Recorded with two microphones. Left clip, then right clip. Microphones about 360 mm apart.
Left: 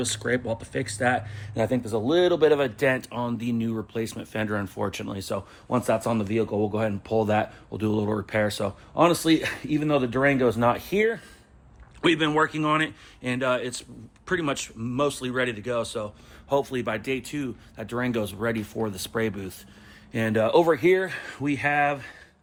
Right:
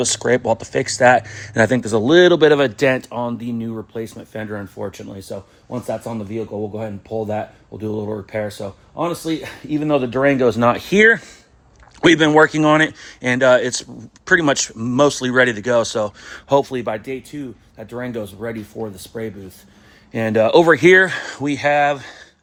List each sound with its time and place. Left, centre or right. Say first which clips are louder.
0.0 s speech: right 10 dB; centre
3.0 s speech: right 6 dB; centre
20.1 s speech: right 8 dB; centre